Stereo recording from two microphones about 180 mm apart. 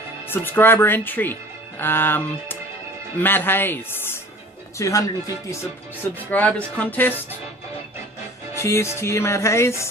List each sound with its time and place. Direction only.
0.3 s music: 10° left (ahead or behind)
4.8 s speech: 20° left (ahead or behind)
6.0 s music: 10° left (ahead or behind)
8.5 s music: 15° left (ahead or behind)